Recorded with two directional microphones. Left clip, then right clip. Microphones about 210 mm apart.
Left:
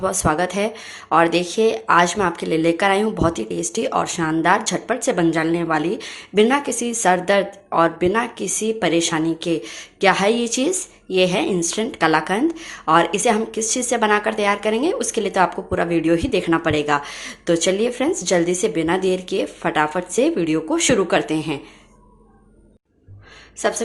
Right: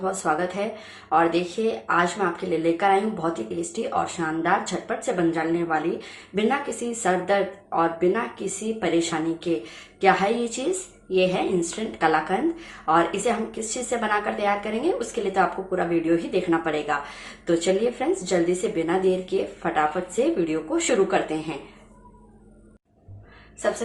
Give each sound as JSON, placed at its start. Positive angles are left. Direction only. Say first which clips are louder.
{"t": 0.0, "sound": "a woman's voice", "louder": "left 5 dB", "side_deg": 50}